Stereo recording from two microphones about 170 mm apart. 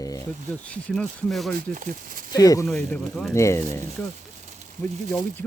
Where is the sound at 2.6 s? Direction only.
5° left (ahead or behind).